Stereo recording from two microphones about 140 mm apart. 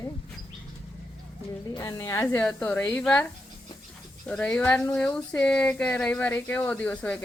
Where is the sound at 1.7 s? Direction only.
25° left (ahead or behind); by 3.2 s 5° left (ahead or behind).